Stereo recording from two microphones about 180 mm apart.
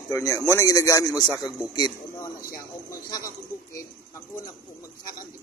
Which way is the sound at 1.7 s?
25° left (ahead or behind).